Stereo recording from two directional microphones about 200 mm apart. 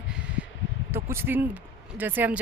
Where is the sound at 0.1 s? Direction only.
5° right (ahead or behind).